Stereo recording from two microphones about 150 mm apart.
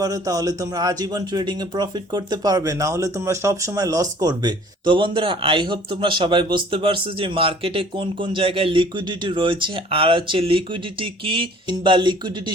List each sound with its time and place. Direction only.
0.0 s speech: 25° right (ahead or behind)